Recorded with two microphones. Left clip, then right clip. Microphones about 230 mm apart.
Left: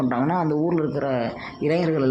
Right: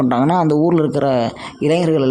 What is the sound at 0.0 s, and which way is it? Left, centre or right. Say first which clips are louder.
Speech: right 7 dB; right.